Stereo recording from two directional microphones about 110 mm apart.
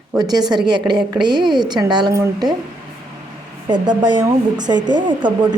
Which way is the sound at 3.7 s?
45° right (ahead or behind).